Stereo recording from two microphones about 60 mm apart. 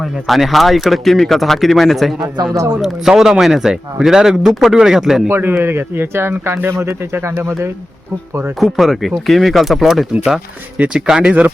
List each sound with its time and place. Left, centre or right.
0.0 s speech: centre
2.2 s speech: right
2.8 s speech: centre
5.3 s speech: right
8.6 s speech: centre
11.3 s speech: right